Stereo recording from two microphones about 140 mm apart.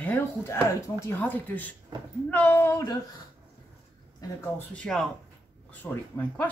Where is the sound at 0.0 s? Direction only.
15° left (ahead or behind).